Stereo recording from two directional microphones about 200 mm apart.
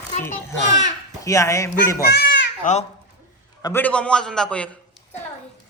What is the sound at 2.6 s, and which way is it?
Speech, 35° left (ahead or behind).